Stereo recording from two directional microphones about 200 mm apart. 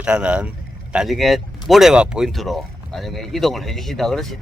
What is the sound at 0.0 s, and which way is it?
Speech, 5° right (ahead or behind).